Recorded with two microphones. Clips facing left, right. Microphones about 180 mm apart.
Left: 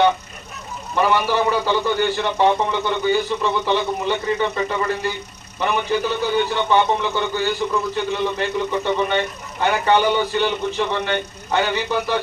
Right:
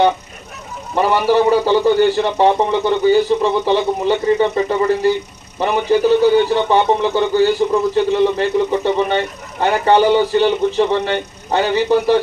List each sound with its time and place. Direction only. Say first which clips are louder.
1.1 s a man's voice: right 9 dB; 35° right (ahead or behind)